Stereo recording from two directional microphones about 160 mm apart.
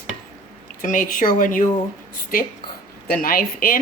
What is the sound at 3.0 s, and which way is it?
Speech, 65° left (ahead or behind).